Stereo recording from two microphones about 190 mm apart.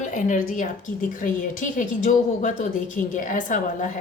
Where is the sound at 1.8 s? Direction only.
40° left (ahead or behind).